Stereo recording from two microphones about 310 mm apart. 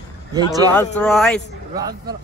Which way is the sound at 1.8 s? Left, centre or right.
Centre.